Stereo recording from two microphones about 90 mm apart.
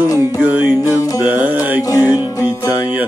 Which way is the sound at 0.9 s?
40° left (ahead or behind).